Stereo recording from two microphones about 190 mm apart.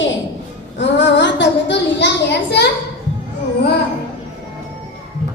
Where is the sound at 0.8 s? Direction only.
70° left (ahead or behind).